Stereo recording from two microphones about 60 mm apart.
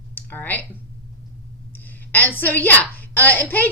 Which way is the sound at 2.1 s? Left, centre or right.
Left.